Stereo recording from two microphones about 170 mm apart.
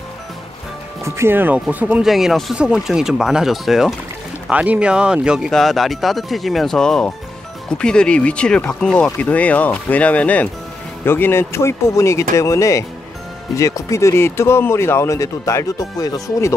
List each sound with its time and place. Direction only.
1.0 s speech: 15° right (ahead or behind); by 16.5 s 20° left (ahead or behind)